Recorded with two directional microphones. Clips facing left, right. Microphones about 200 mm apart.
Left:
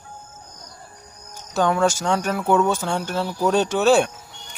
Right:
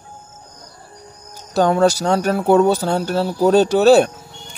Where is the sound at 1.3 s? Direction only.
35° right (ahead or behind).